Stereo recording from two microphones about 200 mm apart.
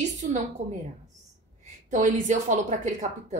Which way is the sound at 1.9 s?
40° right (ahead or behind).